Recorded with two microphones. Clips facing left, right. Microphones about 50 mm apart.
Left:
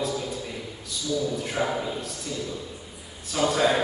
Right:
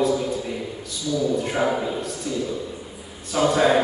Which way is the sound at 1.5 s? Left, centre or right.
Centre.